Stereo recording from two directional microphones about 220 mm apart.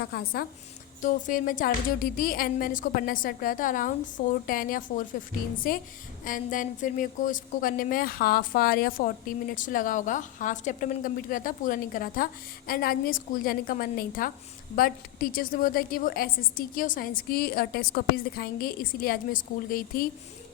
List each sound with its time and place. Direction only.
0.0 s a woman's voice: 45° left (ahead or behind)